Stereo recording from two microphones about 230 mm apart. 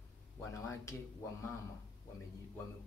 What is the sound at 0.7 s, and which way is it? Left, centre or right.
Speech, centre.